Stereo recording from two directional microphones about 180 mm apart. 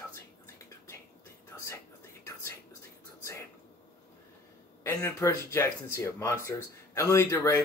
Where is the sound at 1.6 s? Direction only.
15° left (ahead or behind).